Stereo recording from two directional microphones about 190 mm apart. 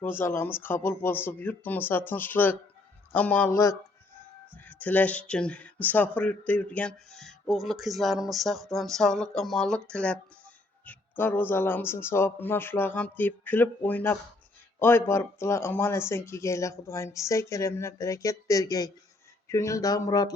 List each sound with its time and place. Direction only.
0.0 s speech: 10° left (ahead or behind)